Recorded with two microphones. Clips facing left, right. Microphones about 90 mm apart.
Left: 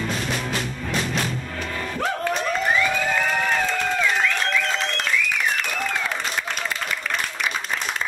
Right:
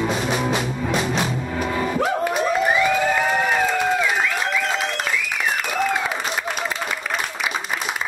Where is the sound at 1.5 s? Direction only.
15° right (ahead or behind).